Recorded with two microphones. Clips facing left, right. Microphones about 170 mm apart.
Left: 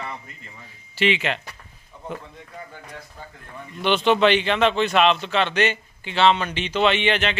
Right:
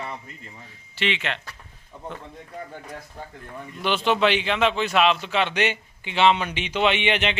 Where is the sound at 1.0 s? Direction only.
5° left (ahead or behind).